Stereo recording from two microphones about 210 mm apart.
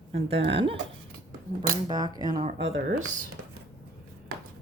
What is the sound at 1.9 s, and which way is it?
Speech, 20° right (ahead or behind).